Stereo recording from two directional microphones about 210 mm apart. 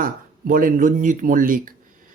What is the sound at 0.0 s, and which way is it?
Speech, 40° right (ahead or behind).